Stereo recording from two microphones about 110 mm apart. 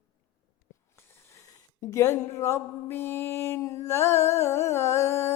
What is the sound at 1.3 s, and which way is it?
Music, 30° left (ahead or behind).